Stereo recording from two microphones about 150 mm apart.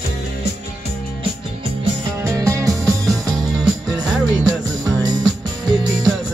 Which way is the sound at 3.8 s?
5° right (ahead or behind).